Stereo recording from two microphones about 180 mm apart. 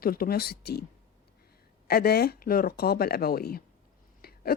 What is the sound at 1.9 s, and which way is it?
A woman's voice, 60° left (ahead or behind).